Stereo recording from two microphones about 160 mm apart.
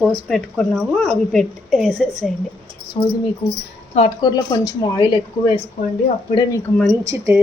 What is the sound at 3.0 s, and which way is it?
Speech, 40° left (ahead or behind).